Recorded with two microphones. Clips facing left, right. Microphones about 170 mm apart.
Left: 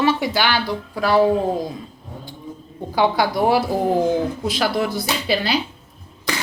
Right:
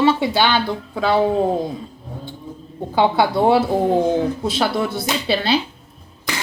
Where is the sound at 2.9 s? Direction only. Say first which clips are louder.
Right 2 dB; 25° right (ahead or behind).